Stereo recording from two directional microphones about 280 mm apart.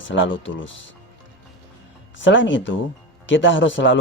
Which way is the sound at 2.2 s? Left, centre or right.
Left.